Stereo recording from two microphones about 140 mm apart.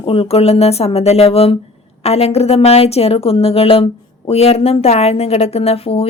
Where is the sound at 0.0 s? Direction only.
40° left (ahead or behind).